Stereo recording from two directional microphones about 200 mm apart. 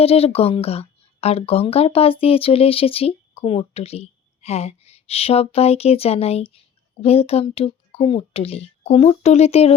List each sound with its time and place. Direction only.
0.0 s a woman's voice: 30° left (ahead or behind)